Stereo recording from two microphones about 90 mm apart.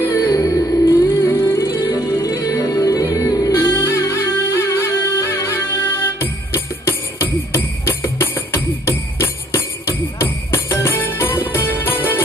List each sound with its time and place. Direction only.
0.2 s music: 40° left (ahead or behind)
0.8 s music: 25° left (ahead or behind); by 3.5 s 40° left (ahead or behind)
3.5 s music: 25° left (ahead or behind)